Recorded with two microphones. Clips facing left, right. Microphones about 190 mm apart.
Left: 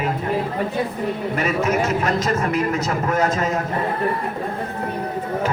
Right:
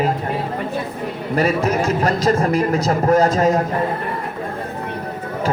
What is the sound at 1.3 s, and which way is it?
A man's voice, 35° right (ahead or behind).